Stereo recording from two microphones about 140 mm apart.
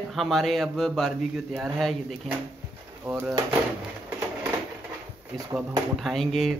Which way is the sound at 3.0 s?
15° right (ahead or behind).